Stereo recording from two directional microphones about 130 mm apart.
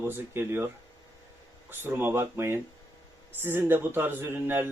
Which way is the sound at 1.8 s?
15° right (ahead or behind).